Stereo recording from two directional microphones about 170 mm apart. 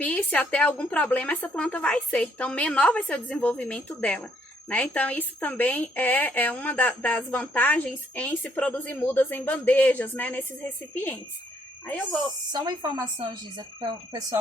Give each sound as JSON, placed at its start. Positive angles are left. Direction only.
{"t": 0.0, "sound": "a woman's voice", "side_deg": 10}
{"t": 12.5, "sound": "speech", "side_deg": -25}